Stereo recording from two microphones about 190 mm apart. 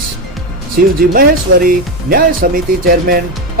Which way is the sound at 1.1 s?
50° right (ahead or behind).